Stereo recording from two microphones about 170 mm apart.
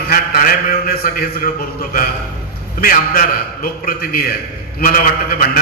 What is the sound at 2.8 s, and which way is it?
A man's voice, 55° left (ahead or behind).